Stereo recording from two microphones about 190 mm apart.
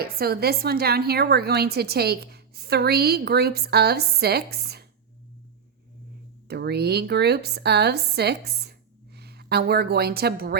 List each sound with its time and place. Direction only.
0.0 s a woman's voice: 55° right (ahead or behind)
6.5 s a woman's voice: 60° right (ahead or behind)